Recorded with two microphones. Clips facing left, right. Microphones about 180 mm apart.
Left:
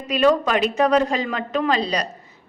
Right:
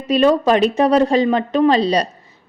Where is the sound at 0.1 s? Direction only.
30° right (ahead or behind).